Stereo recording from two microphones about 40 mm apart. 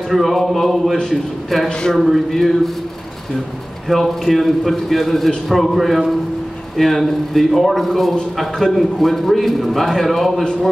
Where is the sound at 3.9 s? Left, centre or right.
Centre.